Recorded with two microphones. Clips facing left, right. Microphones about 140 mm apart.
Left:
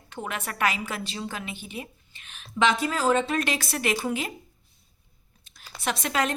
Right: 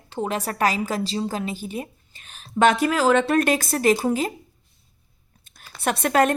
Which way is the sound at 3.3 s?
50° right (ahead or behind).